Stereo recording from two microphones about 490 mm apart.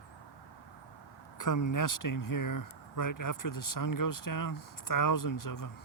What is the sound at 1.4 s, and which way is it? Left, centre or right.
Speech, left.